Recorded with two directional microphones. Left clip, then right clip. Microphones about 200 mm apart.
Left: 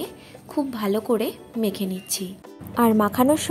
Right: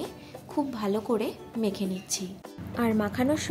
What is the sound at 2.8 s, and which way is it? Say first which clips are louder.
Speech: left 8 dB; 30° left (ahead or behind).